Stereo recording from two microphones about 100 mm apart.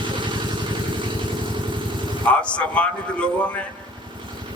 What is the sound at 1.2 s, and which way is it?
Vehicle, 50° right (ahead or behind).